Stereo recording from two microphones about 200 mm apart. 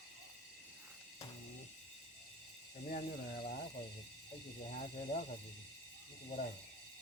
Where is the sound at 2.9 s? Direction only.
50° left (ahead or behind).